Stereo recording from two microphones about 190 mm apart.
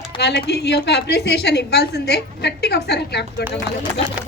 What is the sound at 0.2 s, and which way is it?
A woman's voice, 60° left (ahead or behind).